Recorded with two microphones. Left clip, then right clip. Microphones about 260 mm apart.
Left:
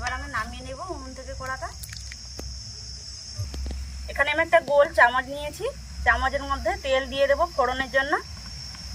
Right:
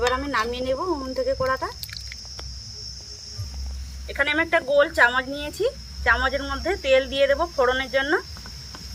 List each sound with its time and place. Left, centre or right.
0.1 s cricket: right
4.1 s speech: centre